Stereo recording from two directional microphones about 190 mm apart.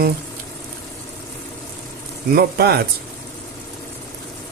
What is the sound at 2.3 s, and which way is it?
Speech, 55° right (ahead or behind).